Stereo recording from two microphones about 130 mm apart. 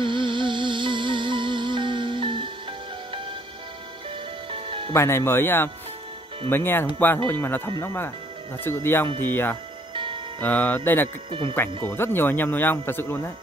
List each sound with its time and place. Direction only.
0.0 s music: 40° right (ahead or behind)
4.5 s music: 45° right (ahead or behind)
4.9 s speech: 20° left (ahead or behind)
11.2 s speech: 40° right (ahead or behind)
11.9 s speech: 15° left (ahead or behind)